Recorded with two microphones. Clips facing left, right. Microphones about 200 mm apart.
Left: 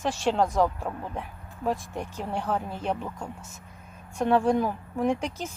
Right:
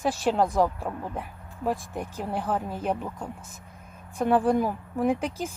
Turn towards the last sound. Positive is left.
turn(degrees=-10)  # may be behind; listen again after turning